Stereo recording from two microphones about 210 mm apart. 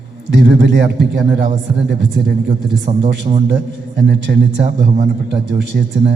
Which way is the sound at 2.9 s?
30° right (ahead or behind).